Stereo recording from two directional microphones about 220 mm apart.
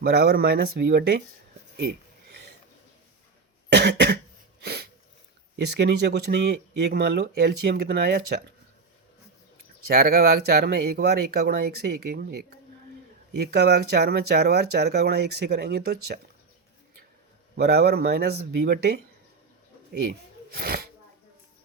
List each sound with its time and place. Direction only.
0.0 s speech: 45° right (ahead or behind)
3.7 s cough: 50° right (ahead or behind)
4.6 s sneeze: 45° right (ahead or behind)
5.5 s speech: 50° right (ahead or behind)
9.8 s speech: 45° right (ahead or behind)
17.6 s speech: 45° right (ahead or behind)